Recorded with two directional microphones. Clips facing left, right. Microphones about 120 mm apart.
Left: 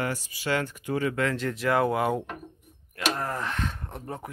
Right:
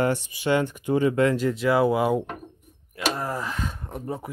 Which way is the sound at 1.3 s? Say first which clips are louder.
Right 4 dB; 5° right (ahead or behind).